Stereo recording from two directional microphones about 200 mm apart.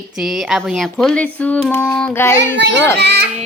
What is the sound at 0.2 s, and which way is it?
Speech, centre (ahead or behind).